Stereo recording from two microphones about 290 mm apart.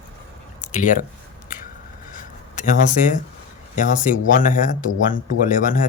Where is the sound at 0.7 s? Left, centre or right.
Left.